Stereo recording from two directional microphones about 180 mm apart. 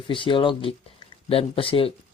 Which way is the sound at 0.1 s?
30° left (ahead or behind).